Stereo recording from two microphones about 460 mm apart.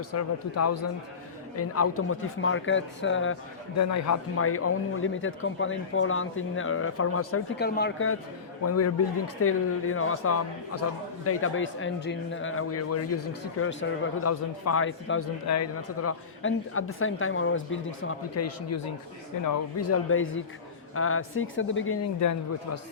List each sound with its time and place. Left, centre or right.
0.1 s speech: left
3.8 s speech: left
19.5 s speech: left